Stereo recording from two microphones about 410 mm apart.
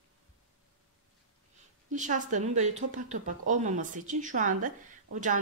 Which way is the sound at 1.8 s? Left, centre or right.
Centre.